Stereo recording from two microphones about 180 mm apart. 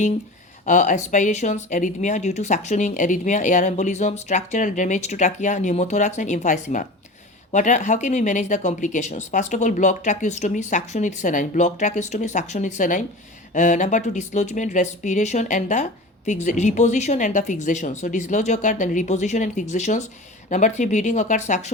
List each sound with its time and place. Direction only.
0.6 s speech: 45° left (ahead or behind)